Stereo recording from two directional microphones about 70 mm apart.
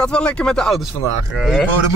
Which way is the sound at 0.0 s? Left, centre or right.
Centre.